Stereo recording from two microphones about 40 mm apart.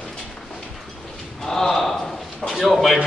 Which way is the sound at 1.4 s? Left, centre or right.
Centre.